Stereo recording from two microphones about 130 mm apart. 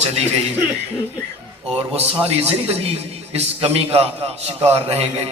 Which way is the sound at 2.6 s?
50° right (ahead or behind).